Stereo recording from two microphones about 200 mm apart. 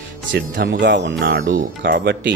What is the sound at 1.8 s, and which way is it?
Speech, 55° right (ahead or behind).